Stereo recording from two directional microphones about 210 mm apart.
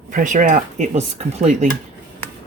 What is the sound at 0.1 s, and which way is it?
Speech, 40° right (ahead or behind).